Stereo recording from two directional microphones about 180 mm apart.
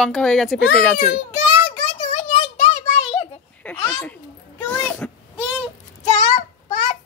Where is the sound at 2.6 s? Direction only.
35° left (ahead or behind).